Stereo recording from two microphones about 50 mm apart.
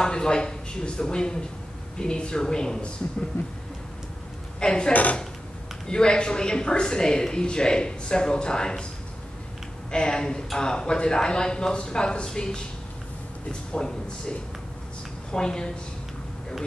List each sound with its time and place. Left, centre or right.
0.0 s speech: centre
4.6 s speech: centre
9.8 s speech: centre
15.3 s speech: centre